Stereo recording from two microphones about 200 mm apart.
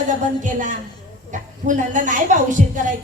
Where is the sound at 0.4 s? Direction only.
40° right (ahead or behind).